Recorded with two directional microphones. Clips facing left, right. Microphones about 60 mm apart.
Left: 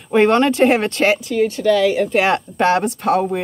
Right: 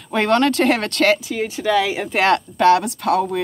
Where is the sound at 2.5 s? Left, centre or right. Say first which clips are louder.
Right 2 dB; left.